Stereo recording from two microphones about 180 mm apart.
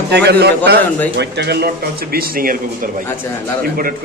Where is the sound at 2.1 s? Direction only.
55° right (ahead or behind).